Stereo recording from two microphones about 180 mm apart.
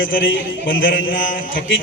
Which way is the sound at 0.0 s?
90° left.